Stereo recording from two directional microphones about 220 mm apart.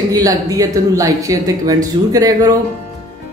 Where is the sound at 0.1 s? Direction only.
15° right (ahead or behind).